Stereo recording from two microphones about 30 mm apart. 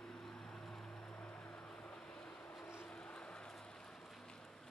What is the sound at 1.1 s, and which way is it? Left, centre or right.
Music, left.